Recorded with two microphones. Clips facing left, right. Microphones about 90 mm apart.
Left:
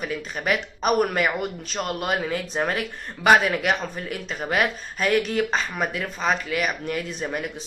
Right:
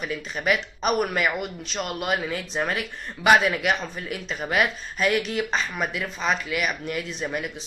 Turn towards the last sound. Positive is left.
turn(degrees=40)  # may be behind; listen again after turning